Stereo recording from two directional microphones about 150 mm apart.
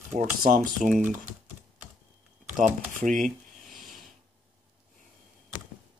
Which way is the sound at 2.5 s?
60° right (ahead or behind).